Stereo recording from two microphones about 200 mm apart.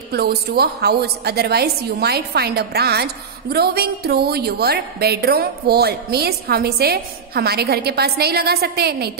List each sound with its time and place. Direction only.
0.1 s a woman's voice: 50° right (ahead or behind)